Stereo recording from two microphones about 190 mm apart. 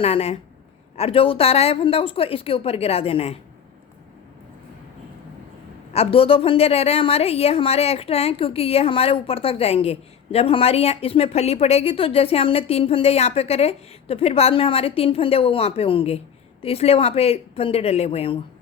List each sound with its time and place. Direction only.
0.0 s a woman's voice: 30° left (ahead or behind)
5.9 s a woman's voice: 30° left (ahead or behind)